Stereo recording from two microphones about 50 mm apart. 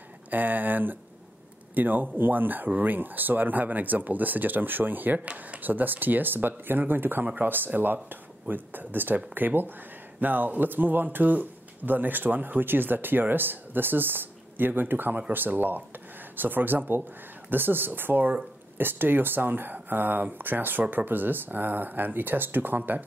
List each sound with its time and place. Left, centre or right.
0.3 s speech: right
5.7 s speech: right